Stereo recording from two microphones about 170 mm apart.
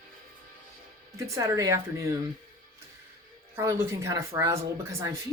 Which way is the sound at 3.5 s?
15° right (ahead or behind).